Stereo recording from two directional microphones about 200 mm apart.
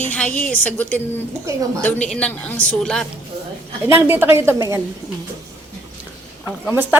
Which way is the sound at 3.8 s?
10° right (ahead or behind).